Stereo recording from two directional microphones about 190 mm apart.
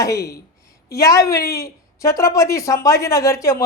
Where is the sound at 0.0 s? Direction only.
15° left (ahead or behind).